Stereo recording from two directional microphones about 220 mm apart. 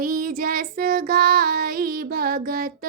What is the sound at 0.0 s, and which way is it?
Child singing, 40° right (ahead or behind).